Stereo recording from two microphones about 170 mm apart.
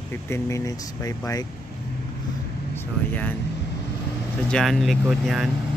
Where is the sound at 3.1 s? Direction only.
10° left (ahead or behind).